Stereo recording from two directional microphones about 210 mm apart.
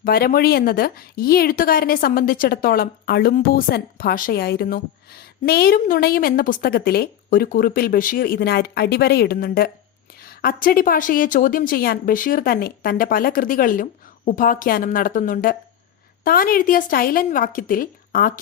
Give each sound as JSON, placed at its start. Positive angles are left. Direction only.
{"t": 0.0, "sound": "a woman's voice", "side_deg": 45}